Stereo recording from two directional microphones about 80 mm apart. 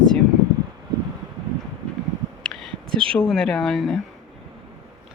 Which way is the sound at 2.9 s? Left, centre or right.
Right.